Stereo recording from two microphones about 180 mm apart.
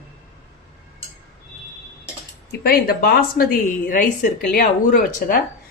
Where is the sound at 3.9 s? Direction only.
45° left (ahead or behind).